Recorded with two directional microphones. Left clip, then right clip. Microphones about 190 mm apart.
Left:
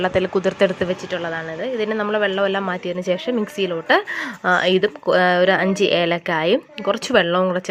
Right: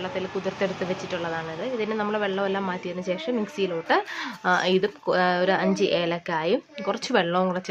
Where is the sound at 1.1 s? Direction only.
25° left (ahead or behind).